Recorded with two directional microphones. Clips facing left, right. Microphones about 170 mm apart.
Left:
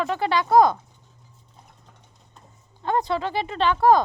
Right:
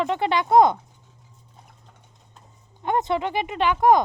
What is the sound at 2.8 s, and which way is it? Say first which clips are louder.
Speech: right 1 dB; 20° right (ahead or behind).